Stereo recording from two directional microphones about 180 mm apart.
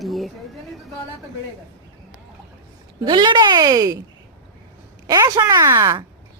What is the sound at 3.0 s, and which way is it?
Speech, 25° right (ahead or behind).